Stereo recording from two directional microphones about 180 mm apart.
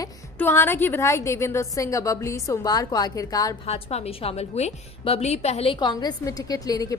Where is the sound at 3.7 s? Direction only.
35° left (ahead or behind).